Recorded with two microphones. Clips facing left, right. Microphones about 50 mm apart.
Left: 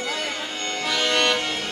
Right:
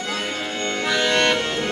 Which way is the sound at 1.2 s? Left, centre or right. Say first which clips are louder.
Right 2 dB; centre.